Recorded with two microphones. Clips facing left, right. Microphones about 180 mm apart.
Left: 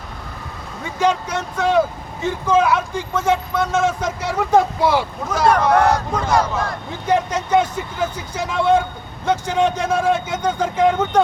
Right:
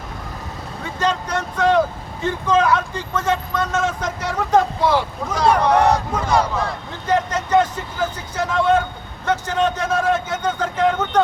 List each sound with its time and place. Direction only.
0.9 s speech: 10° left (ahead or behind)
7.1 s speech: 10° left (ahead or behind)